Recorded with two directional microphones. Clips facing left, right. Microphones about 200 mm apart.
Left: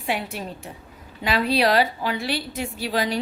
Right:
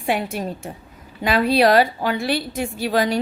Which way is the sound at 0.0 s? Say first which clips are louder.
Right 5 dB; 50° right (ahead or behind).